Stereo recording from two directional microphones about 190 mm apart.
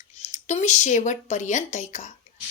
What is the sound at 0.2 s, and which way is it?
Speech, 35° left (ahead or behind).